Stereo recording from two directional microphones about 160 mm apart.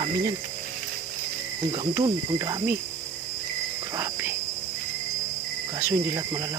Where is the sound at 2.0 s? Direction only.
25° right (ahead or behind).